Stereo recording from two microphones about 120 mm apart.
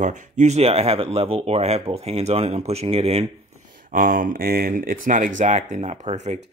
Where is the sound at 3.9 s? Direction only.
90° right.